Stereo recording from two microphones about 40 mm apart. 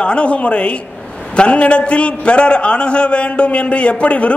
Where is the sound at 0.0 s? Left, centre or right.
Left.